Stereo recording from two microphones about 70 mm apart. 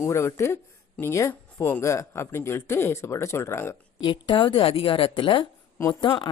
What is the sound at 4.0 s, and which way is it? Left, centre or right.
Speech, left.